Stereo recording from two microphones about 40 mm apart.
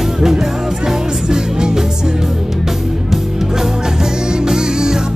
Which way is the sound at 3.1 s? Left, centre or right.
Centre.